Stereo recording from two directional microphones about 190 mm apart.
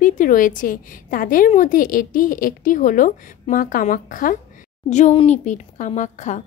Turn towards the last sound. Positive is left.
turn(degrees=40)  # may be behind; listen again after turning